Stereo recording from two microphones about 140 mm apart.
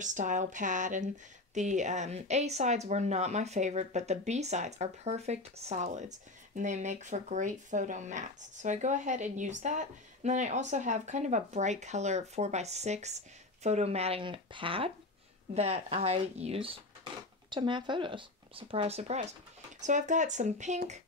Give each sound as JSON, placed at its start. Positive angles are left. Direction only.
{"t": 0.0, "sound": "speech", "side_deg": -65}
{"t": 15.5, "sound": "speech", "side_deg": -50}